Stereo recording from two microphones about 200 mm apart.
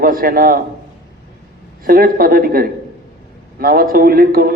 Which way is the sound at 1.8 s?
45° right (ahead or behind).